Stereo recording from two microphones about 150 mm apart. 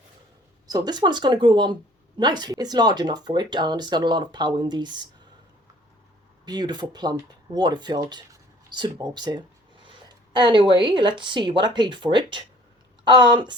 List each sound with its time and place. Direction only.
0.7 s speech: 25° right (ahead or behind)
6.4 s speech: 30° right (ahead or behind)